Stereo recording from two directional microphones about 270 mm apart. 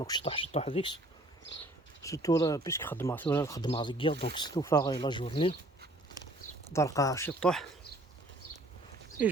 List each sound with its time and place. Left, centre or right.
0.0 s speech: centre
2.0 s speech: centre
6.7 s speech: centre